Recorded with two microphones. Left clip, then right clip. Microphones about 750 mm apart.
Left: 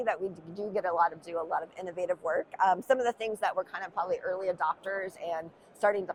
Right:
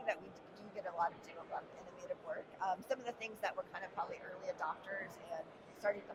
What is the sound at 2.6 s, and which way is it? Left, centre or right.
Speech, left.